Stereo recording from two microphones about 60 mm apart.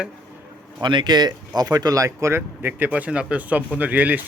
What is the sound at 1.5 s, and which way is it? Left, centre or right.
Speech, right.